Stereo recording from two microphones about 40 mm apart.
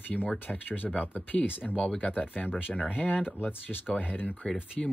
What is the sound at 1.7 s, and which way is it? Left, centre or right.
Speech, left.